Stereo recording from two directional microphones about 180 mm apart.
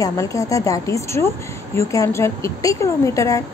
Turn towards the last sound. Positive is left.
turn(degrees=15)  # may be behind; listen again after turning